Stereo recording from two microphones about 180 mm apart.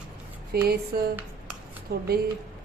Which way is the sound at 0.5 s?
65° right (ahead or behind).